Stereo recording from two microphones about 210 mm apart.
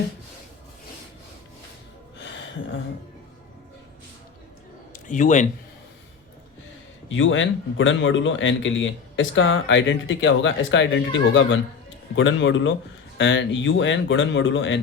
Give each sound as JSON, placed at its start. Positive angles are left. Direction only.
{"t": 5.0, "sound": "speech", "side_deg": 35}
{"t": 7.2, "sound": "speech", "side_deg": 65}